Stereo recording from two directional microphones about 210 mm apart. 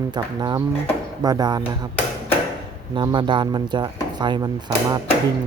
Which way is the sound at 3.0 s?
20° right (ahead or behind).